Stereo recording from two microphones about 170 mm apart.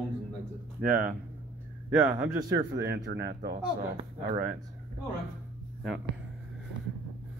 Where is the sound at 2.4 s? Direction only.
20° right (ahead or behind).